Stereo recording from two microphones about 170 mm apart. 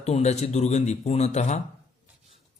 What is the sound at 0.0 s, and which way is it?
Speech, 40° left (ahead or behind).